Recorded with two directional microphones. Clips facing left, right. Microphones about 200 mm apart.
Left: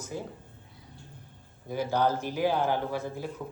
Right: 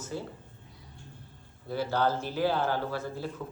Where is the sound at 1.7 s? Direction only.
15° left (ahead or behind).